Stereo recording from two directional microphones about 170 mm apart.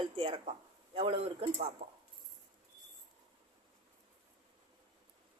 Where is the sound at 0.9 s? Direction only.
35° right (ahead or behind).